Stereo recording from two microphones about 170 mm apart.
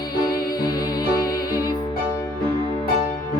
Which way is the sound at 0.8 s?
20° left (ahead or behind).